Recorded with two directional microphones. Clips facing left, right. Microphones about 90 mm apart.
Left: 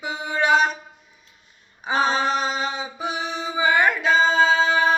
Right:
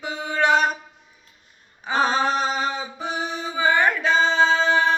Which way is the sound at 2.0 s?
40° right (ahead or behind).